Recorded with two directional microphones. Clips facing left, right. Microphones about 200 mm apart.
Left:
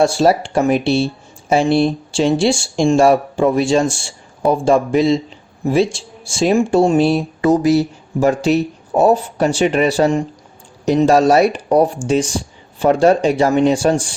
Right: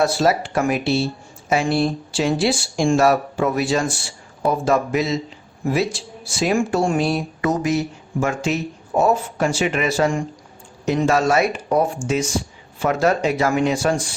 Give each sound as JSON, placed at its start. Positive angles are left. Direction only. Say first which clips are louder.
{"t": 0.0, "sound": "speech", "louder": "left 5 dB", "side_deg": 30}